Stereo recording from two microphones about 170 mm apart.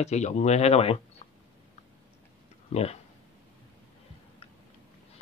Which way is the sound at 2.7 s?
40° left (ahead or behind).